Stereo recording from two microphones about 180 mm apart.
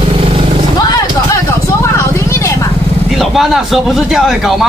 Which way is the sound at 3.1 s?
Centre (ahead or behind).